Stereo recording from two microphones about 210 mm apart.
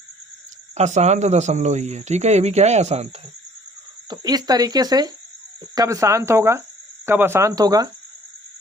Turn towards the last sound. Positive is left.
turn(degrees=-15)  # may be behind; listen again after turning